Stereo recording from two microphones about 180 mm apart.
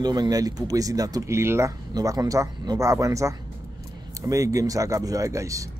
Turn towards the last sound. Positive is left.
turn(degrees=-20)  # may be behind; listen again after turning